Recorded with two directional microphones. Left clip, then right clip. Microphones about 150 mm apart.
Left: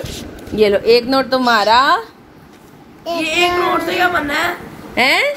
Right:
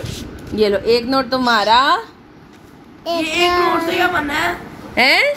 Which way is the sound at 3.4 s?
55° right (ahead or behind).